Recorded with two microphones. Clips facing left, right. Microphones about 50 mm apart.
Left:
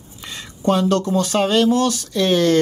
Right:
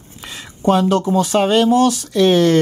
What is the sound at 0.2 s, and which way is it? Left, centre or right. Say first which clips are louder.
Speech: right 2 dB; centre.